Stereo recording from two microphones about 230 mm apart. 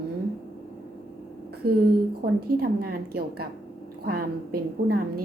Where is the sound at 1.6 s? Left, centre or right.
Right.